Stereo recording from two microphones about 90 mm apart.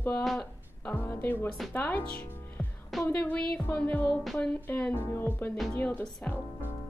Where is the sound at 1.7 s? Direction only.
20° left (ahead or behind).